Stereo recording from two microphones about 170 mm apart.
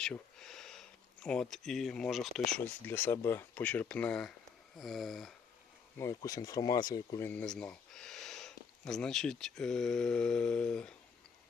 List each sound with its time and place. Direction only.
0.0 s speech: 5° left (ahead or behind)
6.0 s speech: 20° left (ahead or behind)
7.3 s speech: 5° left (ahead or behind)